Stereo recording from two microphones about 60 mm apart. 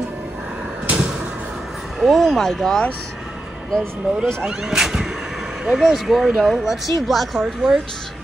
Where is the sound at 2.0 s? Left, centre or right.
Centre.